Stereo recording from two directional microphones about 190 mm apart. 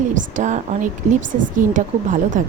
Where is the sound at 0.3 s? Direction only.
40° right (ahead or behind).